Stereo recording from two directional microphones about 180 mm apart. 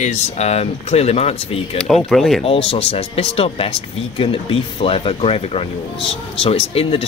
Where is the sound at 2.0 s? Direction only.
Centre (ahead or behind).